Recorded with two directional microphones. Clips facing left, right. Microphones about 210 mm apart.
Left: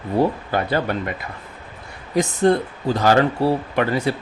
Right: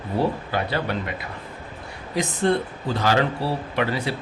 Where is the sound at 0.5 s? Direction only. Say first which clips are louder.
Left 3 dB; 50° left (ahead or behind).